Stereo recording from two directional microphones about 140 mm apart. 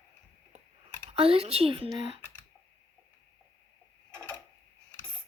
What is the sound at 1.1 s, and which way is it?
Speech, 45° right (ahead or behind).